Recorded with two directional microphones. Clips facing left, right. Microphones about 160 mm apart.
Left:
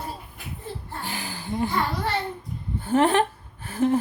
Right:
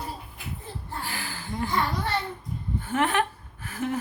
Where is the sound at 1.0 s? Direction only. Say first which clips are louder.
Left 3 dB; 20° left (ahead or behind).